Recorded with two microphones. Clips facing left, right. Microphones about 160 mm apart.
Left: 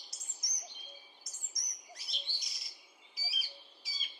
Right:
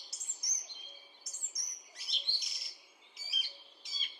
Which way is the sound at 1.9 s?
Centre (ahead or behind).